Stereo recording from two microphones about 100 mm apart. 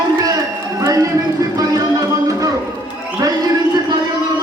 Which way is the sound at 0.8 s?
35° right (ahead or behind).